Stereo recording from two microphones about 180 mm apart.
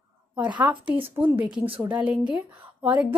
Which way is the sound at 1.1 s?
10° right (ahead or behind).